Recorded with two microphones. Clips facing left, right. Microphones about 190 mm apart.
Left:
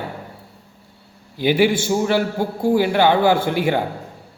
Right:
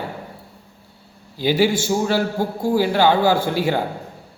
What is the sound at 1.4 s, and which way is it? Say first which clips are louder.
A man's voice: left 1 dB; 55° left (ahead or behind).